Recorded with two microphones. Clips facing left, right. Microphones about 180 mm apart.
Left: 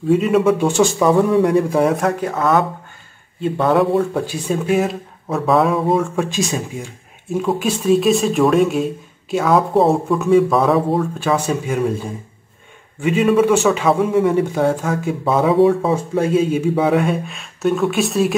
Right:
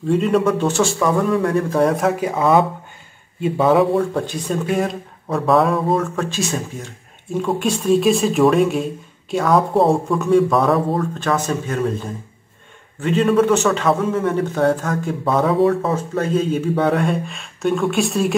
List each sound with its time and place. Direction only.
0.1 s speech: 5° left (ahead or behind)
1.8 s speech: centre (ahead or behind)
3.4 s speech: 5° right (ahead or behind)
6.3 s speech: 15° left (ahead or behind)
7.3 s speech: 5° left (ahead or behind)
13.0 s speech: 5° left (ahead or behind)